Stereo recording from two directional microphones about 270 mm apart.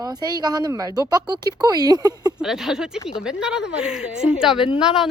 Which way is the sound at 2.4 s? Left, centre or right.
Centre.